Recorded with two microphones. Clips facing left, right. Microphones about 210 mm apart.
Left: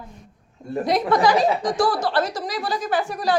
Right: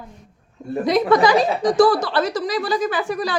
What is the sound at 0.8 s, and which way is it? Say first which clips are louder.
Speech: right 3 dB; 90° right.